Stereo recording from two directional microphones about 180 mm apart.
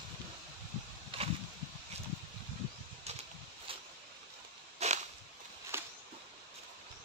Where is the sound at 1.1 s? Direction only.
30° right (ahead or behind).